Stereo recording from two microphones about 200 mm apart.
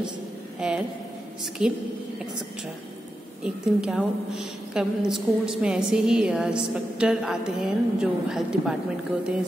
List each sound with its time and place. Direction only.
0.6 s a woman's voice: 5° right (ahead or behind)
3.4 s a woman's voice: 5° right (ahead or behind)